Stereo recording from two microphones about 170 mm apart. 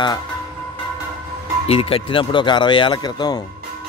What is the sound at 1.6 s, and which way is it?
Speech, 35° left (ahead or behind).